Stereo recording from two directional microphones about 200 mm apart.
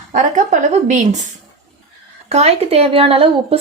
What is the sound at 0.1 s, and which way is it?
A woman's voice, 40° right (ahead or behind).